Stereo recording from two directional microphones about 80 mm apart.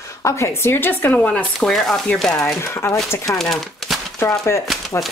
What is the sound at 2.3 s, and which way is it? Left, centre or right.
Speech, left.